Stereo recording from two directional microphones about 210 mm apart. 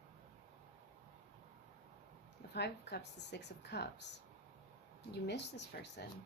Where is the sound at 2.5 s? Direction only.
50° left (ahead or behind).